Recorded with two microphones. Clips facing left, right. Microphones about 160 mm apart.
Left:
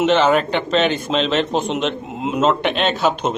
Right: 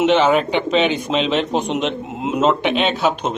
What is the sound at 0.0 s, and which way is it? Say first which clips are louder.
Speech: right 1 dB; 5° right (ahead or behind).